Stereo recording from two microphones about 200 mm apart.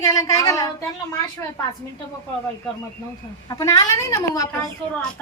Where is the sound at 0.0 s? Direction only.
15° left (ahead or behind).